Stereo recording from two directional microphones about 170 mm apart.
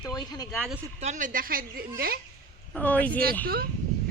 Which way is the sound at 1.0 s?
45° right (ahead or behind).